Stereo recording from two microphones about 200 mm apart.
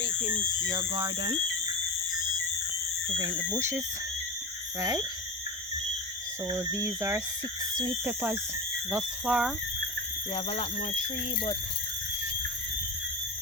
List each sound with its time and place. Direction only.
0.7 s speech: 20° right (ahead or behind)
3.2 s speech: 20° right (ahead or behind)
6.5 s speech: 15° right (ahead or behind)
10.3 s speech: 35° left (ahead or behind)